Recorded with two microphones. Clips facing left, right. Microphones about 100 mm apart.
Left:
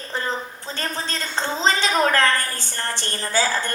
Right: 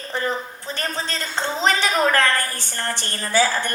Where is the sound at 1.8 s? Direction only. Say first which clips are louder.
Left 1 dB; 20° left (ahead or behind).